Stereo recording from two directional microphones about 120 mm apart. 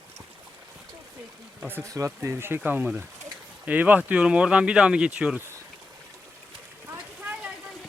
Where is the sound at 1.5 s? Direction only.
15° right (ahead or behind).